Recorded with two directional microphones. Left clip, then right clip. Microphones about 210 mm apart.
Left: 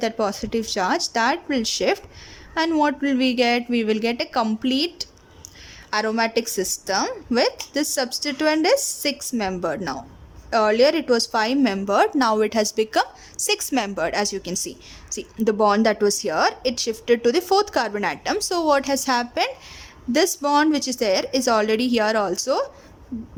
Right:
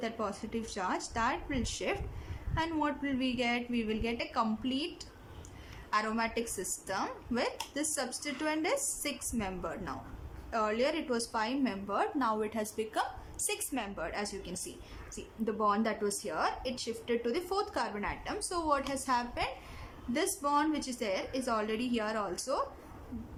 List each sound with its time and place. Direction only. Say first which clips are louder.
0.0 s a woman's voice: left 13 dB; 40° left (ahead or behind)
5.9 s a woman's voice: left 11 dB; 40° left (ahead or behind)